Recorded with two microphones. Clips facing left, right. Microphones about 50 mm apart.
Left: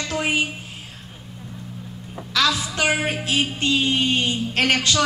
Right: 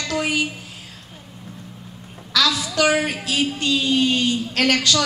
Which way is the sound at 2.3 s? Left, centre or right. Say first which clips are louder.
Right 1 dB; left.